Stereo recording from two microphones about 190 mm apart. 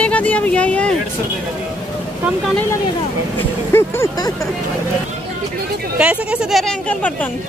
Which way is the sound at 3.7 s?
15° left (ahead or behind).